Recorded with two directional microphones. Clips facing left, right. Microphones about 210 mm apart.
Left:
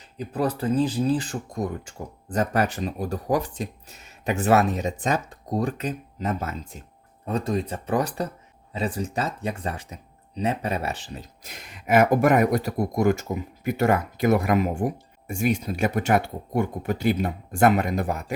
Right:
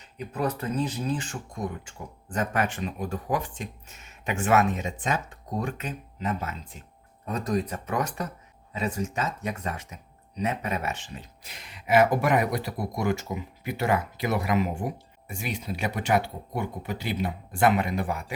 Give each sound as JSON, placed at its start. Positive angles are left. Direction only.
{"t": 0.2, "sound": "speech", "side_deg": 30}
{"t": 7.3, "sound": "speech", "side_deg": 30}